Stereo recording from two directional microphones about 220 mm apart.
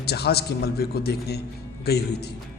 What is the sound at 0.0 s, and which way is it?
A man's voice, 45° left (ahead or behind).